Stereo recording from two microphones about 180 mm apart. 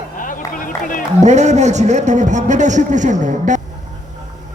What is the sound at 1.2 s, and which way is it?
A man's voice, 40° right (ahead or behind).